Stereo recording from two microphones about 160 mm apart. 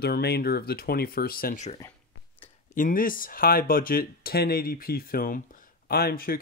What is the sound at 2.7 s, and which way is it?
Speech, 60° left (ahead or behind).